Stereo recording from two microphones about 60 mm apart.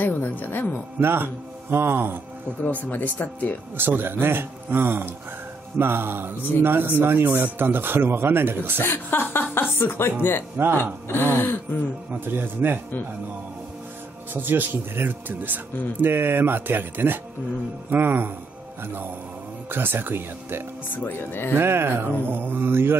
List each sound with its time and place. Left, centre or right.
0.0 s music: left
0.9 s speech: right
2.6 s speech: left
3.7 s speech: right
8.8 s speech: left
12.1 s speech: right
14.3 s speech: right
19.7 s speech: right
20.9 s speech: left
21.5 s speech: right